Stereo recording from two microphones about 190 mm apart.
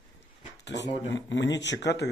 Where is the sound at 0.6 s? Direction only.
65° left (ahead or behind).